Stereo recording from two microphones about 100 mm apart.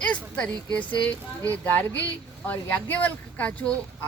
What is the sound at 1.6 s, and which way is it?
A woman's voice, 20° left (ahead or behind).